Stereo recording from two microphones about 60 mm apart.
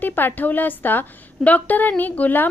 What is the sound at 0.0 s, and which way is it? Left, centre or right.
A woman's voice, left.